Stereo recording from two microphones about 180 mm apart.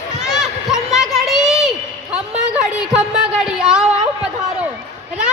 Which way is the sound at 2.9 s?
5° right (ahead or behind).